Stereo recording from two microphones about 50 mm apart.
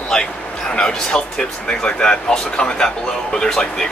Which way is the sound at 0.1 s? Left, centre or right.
Centre.